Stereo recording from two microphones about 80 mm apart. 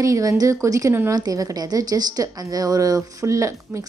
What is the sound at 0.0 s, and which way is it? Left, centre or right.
A woman's voice, right.